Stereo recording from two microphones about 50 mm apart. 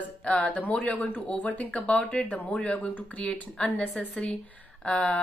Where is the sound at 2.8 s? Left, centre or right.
Left.